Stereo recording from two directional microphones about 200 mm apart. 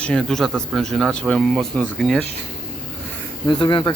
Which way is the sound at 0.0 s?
5° left (ahead or behind).